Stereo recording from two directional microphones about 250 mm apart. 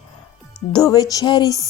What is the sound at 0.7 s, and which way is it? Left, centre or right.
Speech, centre.